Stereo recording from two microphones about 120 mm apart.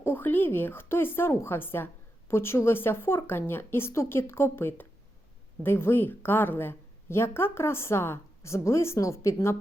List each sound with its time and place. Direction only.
0.0 s a woman's voice: 15° left (ahead or behind)